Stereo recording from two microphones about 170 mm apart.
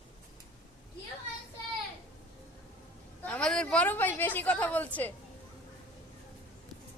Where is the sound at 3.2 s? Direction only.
5° left (ahead or behind).